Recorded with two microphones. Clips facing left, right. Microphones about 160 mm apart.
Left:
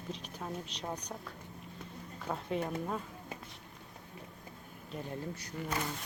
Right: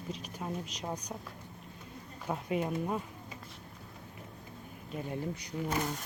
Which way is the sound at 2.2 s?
10° right (ahead or behind).